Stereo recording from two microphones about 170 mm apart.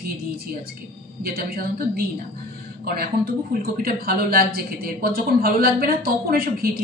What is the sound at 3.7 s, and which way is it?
A woman's voice, 65° right (ahead or behind).